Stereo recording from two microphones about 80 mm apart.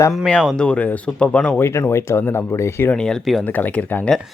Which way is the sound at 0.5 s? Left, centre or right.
Centre.